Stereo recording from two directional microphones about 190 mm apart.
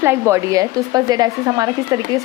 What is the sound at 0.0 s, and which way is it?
Speech, 15° right (ahead or behind).